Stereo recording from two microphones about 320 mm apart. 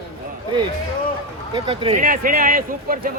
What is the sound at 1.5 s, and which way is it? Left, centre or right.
A man's voice, centre.